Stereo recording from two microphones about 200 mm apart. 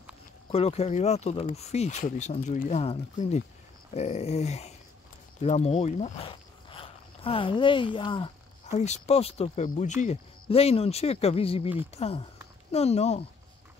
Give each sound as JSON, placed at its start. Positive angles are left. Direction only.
{"t": 0.5, "sound": "speech", "side_deg": 30}